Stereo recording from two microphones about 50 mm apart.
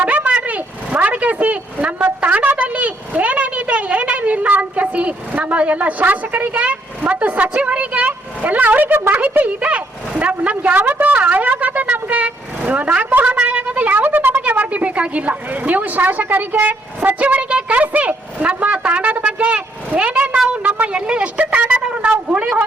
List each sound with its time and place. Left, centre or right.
0.3 s a woman's voice: right
9.6 s a woman's voice: right
11.6 s vehicle: right
13.3 s a woman's voice: right
21.8 s a sound: right